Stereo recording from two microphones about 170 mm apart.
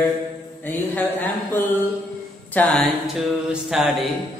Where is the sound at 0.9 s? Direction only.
10° left (ahead or behind).